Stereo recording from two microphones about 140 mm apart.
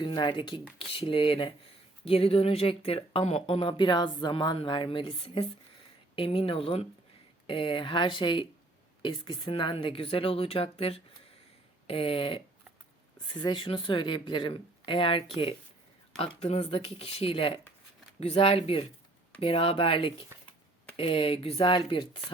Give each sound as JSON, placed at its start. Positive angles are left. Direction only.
{"t": 0.0, "sound": "speech", "side_deg": 35}
{"t": 16.2, "sound": "speech", "side_deg": 50}